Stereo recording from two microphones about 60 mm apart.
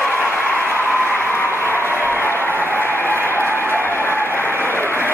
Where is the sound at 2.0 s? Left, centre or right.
Left.